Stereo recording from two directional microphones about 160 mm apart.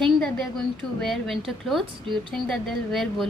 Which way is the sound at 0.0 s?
5° left (ahead or behind).